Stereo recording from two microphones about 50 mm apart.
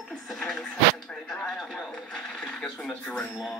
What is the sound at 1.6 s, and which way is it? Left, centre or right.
Television, centre.